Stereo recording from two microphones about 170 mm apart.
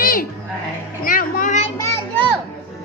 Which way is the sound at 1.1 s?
55° left (ahead or behind).